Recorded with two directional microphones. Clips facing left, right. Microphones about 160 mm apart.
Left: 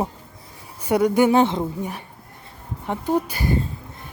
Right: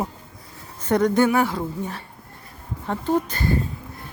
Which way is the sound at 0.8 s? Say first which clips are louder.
Left 1 dB; 10° left (ahead or behind).